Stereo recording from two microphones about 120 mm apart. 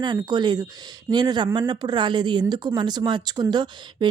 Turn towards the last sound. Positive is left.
turn(degrees=-35)  # may be behind; listen again after turning